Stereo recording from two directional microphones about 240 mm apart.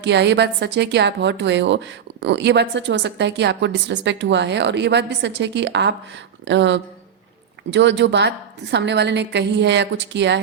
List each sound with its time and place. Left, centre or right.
0.0 s a woman's voice: right